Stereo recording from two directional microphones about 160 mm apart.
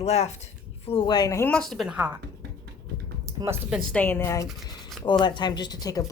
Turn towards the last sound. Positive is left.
turn(degrees=25)  # may be behind; listen again after turning